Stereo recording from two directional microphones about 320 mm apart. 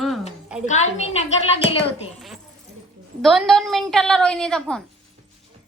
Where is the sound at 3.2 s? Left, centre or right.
Centre.